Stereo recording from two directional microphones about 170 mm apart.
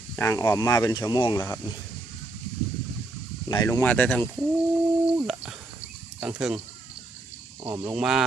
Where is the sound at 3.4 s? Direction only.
20° left (ahead or behind).